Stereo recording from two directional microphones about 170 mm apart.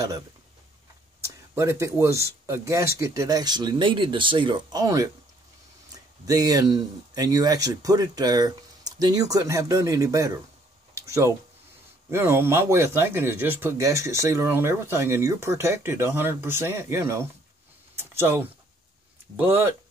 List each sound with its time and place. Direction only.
1.2 s speech: 15° right (ahead or behind)
6.2 s speech: 20° right (ahead or behind)
11.0 s a sound: 20° right (ahead or behind)
12.1 s speech: 15° right (ahead or behind)
17.9 s a sound: 10° right (ahead or behind)
19.3 s speech: 10° right (ahead or behind)